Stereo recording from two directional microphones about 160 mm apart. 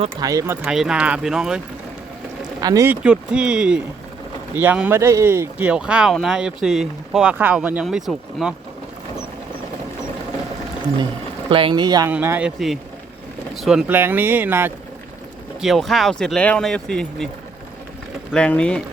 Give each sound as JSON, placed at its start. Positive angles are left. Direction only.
{"t": 0.2, "sound": "speech", "side_deg": -20}
{"t": 0.6, "sound": "speech", "side_deg": -5}
{"t": 2.6, "sound": "speech", "side_deg": -20}
{"t": 2.9, "sound": "speech", "side_deg": -5}
{"t": 11.4, "sound": "speech", "side_deg": -30}
{"t": 12.0, "sound": "speech", "side_deg": -15}
{"t": 15.6, "sound": "speech", "side_deg": 0}
{"t": 18.3, "sound": "speech", "side_deg": 5}